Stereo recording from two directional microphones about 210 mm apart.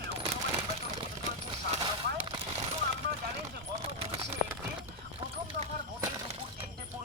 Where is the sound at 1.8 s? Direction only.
25° right (ahead or behind).